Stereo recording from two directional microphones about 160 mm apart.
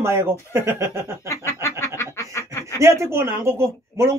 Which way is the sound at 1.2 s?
20° left (ahead or behind).